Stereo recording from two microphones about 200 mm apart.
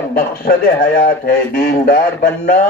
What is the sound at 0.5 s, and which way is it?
A man's voice, 45° left (ahead or behind).